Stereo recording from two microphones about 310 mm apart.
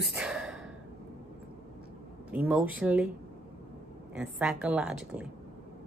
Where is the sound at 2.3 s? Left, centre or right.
Centre.